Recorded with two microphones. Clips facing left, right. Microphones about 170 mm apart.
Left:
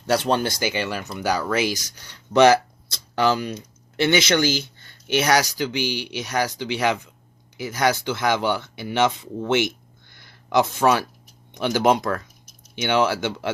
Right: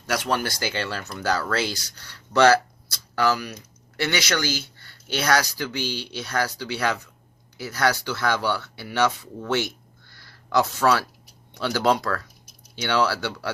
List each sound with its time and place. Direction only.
0.0 s speech: 30° left (ahead or behind)